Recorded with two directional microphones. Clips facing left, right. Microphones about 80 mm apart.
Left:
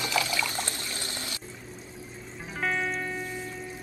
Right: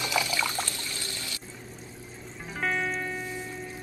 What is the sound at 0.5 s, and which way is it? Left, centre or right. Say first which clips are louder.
Water: even; left.